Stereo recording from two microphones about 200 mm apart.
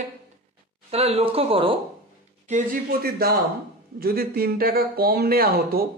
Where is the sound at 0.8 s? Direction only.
30° right (ahead or behind).